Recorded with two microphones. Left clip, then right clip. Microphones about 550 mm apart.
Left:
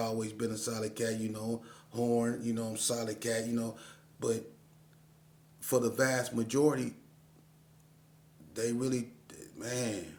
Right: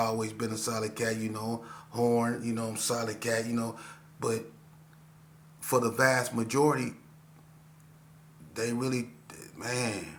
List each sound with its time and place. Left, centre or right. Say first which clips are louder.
0.0 s music: right 4 dB; left
5.6 s music: right 4 dB; left
8.5 s speech: right 2 dB; left